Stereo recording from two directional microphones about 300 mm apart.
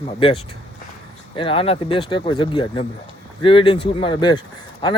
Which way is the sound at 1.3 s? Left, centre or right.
Centre.